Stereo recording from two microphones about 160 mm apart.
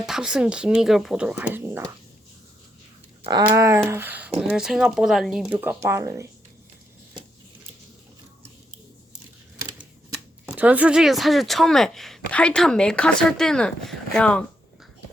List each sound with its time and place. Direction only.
0.0 s speech: 5° right (ahead or behind)
3.2 s a sound: 25° right (ahead or behind)
4.4 s speech: 5° right (ahead or behind)
10.4 s speech: 10° right (ahead or behind); by 14.4 s 5° left (ahead or behind)